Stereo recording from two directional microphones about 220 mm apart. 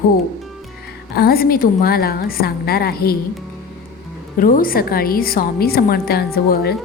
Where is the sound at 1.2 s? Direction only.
45° left (ahead or behind).